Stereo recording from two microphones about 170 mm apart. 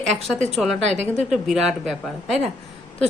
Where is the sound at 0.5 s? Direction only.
Centre (ahead or behind).